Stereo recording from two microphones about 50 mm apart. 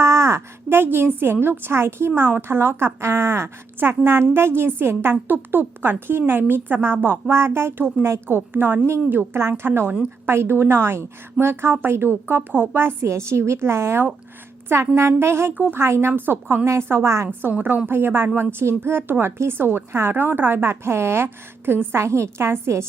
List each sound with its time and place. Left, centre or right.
0.0 s a sound: right
0.7 s a woman's voice: right
3.8 s a woman's voice: right
5.3 s a woman's voice: right
8.3 s a woman's voice: right
10.2 s a woman's voice: right
16.1 s a woman's voice: right
16.9 s a woman's voice: right
17.8 s a woman's voice: right